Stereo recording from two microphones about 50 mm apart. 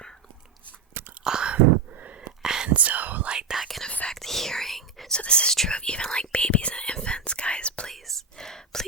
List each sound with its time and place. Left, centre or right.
1.2 s a sound: centre
1.5 s a sound: right
2.1 s whispering: centre
2.6 s whispering: right
3.5 s whispering: centre
3.8 s whispering: left
4.1 s whispering: centre
5.1 s whispering: left
7.9 s whispering: centre